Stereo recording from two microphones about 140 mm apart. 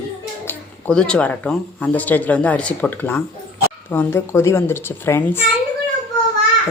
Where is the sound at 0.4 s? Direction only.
10° left (ahead or behind).